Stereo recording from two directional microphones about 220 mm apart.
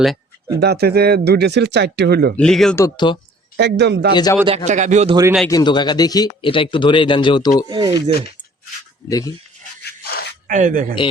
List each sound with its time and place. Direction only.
0.6 s speech: 45° right (ahead or behind)
2.3 s speech: 5° left (ahead or behind)
2.8 s speech: 20° left (ahead or behind)
3.6 s speech: 50° right (ahead or behind)
4.1 s speech: 20° left (ahead or behind)
4.4 s a man's voice: 30° right (ahead or behind)
5.5 s speech: 20° left (ahead or behind)
7.7 s speech: 20° right (ahead or behind)
9.0 s speech: 15° left (ahead or behind)
9.8 s a sound: 45° left (ahead or behind)
10.4 s speech: 35° right (ahead or behind)